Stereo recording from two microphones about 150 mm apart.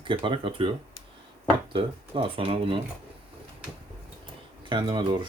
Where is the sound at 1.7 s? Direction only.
35° right (ahead or behind).